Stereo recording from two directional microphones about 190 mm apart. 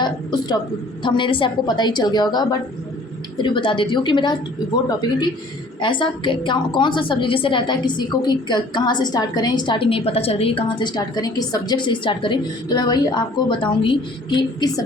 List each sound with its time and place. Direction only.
0.0 s a woman's voice: 20° left (ahead or behind)